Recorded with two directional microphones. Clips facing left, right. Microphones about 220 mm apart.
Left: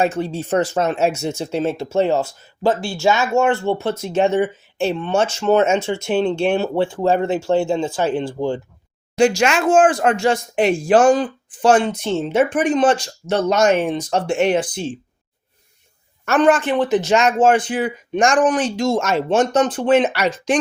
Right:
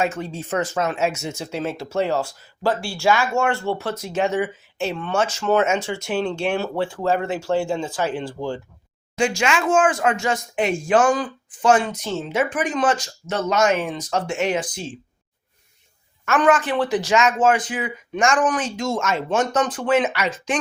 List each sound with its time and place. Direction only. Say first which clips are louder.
0.0 s speech: left 5 dB; 30° left (ahead or behind)
9.1 s speech: left 6 dB; 40° left (ahead or behind)
16.4 s speech: left 3 dB; 25° left (ahead or behind)